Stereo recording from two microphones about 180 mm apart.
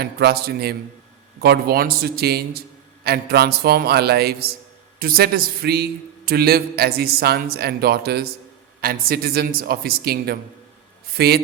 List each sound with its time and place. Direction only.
0.0 s a man's voice: 60° right (ahead or behind)